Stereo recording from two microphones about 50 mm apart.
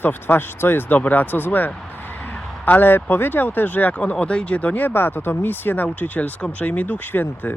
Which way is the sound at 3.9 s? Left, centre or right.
Left.